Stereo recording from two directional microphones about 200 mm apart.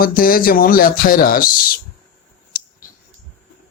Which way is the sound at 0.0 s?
45° left (ahead or behind).